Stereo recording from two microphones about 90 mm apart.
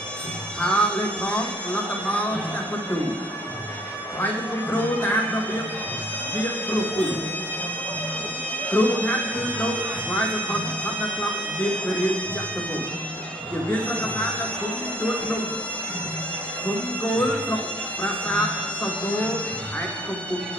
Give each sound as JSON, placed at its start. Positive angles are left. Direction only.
{"t": 0.6, "sound": "speech", "side_deg": 10}
{"t": 4.2, "sound": "speech", "side_deg": 20}
{"t": 8.6, "sound": "speech", "side_deg": 15}
{"t": 13.7, "sound": "speech", "side_deg": 15}
{"t": 16.6, "sound": "speech", "side_deg": 15}